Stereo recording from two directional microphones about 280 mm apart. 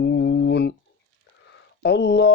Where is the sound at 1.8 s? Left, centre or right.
Left.